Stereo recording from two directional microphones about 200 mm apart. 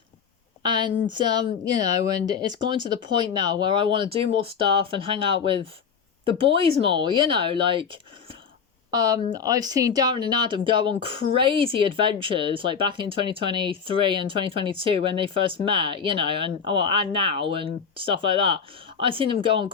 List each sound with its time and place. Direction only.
0.6 s a woman's voice: 25° right (ahead or behind)